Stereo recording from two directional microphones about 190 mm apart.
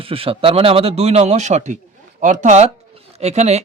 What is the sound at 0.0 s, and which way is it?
Speech, 30° right (ahead or behind).